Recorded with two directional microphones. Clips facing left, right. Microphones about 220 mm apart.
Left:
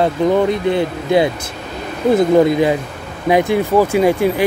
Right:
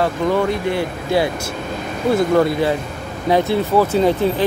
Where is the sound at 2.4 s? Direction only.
15° left (ahead or behind).